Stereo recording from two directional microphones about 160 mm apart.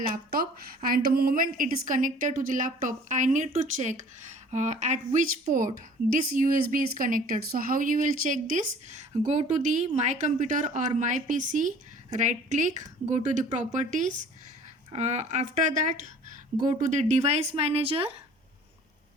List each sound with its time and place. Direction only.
0.0 s a woman's voice: 60° right (ahead or behind); by 18.1 s 35° right (ahead or behind)